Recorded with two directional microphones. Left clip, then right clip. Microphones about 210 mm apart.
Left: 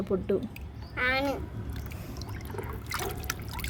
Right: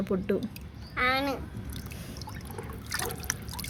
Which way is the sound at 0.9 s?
15° right (ahead or behind).